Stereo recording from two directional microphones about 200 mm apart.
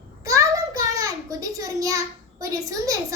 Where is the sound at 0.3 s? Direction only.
15° right (ahead or behind).